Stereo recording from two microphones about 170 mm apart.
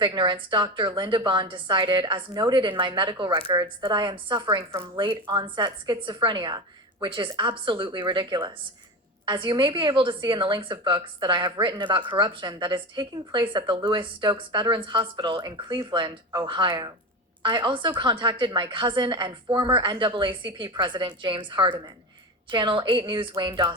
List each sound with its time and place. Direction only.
0.0 s a woman's voice: 25° right (ahead or behind)